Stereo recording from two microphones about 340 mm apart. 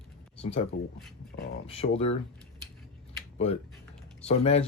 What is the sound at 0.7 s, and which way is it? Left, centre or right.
Speech, left.